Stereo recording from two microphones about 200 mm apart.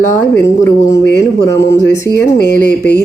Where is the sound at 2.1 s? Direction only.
55° left (ahead or behind).